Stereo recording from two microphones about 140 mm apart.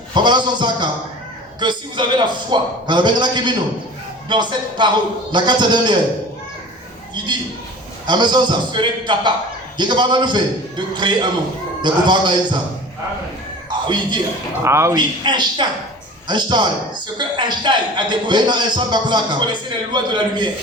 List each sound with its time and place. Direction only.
0.1 s a man's voice: 30° right (ahead or behind)
8.0 s a man's voice: 35° right (ahead or behind)
13.7 s a sound: 35° right (ahead or behind)
14.6 s a man's voice: 20° right (ahead or behind)
14.9 s a man's voice: 35° right (ahead or behind)